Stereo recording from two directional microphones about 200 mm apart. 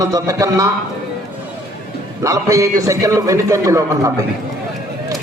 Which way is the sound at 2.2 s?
15° right (ahead or behind).